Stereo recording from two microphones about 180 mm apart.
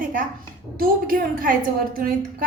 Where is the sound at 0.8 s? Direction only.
55° right (ahead or behind).